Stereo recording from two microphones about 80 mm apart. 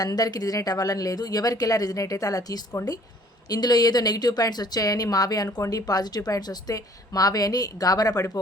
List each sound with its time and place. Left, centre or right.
0.0 s speech: left